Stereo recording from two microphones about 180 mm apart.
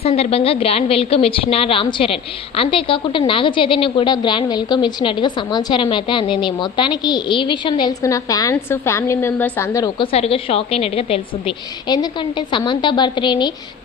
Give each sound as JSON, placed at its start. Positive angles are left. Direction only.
{"t": 0.0, "sound": "a woman's voice", "side_deg": 35}
{"t": 10.0, "sound": "a woman's voice", "side_deg": 30}